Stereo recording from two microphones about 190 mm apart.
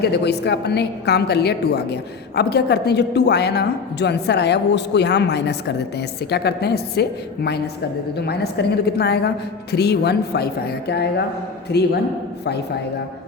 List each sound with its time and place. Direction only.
0.0 s a woman's voice: 60° left (ahead or behind)